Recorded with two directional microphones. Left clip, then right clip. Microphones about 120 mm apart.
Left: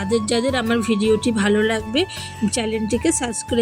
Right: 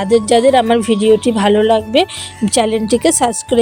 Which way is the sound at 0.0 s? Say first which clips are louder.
Right 10 dB; 35° right (ahead or behind).